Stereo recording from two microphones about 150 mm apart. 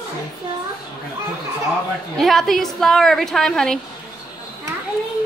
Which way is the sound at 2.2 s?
Centre (ahead or behind).